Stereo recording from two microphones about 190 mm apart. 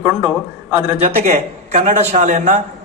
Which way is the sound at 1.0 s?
35° right (ahead or behind).